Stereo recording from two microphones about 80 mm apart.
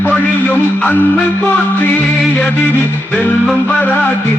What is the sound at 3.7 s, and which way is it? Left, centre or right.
Music, centre.